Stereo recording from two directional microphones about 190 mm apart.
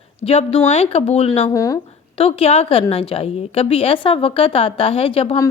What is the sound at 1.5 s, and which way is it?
Speech, 15° left (ahead or behind).